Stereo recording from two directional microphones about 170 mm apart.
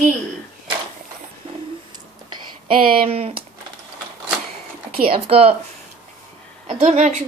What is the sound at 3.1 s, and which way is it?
Speech, 35° right (ahead or behind).